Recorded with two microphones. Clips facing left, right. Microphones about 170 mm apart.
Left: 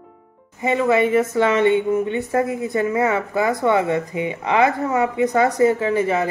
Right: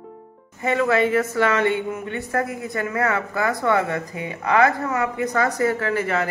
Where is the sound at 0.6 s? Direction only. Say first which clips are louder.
Left 2 dB; 20° left (ahead or behind).